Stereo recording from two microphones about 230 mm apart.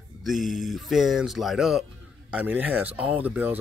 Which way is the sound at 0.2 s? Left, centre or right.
Centre.